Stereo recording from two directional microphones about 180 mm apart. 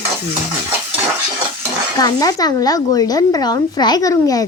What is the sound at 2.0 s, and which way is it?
Speech, 20° left (ahead or behind).